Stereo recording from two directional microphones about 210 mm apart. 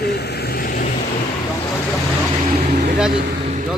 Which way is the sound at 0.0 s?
50° left (ahead or behind).